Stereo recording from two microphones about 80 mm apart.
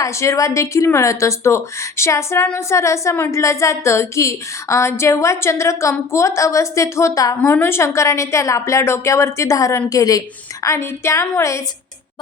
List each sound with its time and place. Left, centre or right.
0.0 s a woman's voice: left
7.5 s a woman's voice: left